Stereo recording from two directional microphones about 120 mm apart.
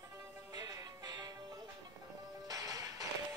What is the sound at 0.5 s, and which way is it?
Music, 35° right (ahead or behind).